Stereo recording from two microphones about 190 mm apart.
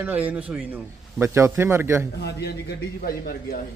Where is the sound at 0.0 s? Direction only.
10° right (ahead or behind).